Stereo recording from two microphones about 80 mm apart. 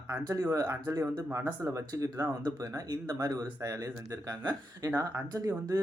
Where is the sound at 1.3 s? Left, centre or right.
Right.